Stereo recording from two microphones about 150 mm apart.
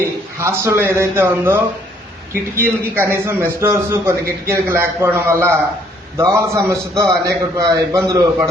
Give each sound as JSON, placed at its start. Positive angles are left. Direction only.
{"t": 0.3, "sound": "a man's voice", "side_deg": -15}